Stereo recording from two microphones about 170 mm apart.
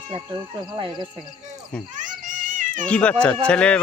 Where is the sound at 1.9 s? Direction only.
50° right (ahead or behind).